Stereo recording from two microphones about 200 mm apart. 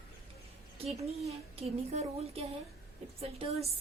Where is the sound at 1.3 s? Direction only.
30° right (ahead or behind).